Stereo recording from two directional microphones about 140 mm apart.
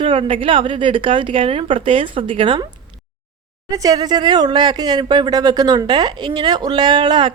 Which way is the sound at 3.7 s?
25° right (ahead or behind).